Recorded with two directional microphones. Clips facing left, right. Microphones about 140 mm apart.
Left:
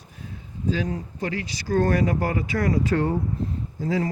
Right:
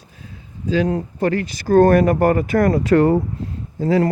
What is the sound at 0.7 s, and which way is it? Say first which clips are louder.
Speech: right 7 dB; 70° right (ahead or behind).